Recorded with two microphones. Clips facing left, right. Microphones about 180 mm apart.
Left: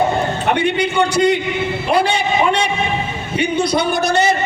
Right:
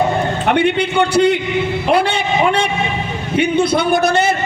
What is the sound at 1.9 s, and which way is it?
Speech, 55° right (ahead or behind).